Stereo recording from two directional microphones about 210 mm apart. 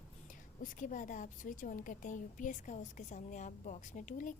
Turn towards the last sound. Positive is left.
turn(degrees=40)  # may be behind; listen again after turning